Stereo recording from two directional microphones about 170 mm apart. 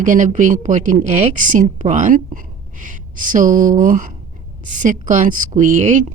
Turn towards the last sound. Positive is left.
turn(degrees=-45)  # may be behind; listen again after turning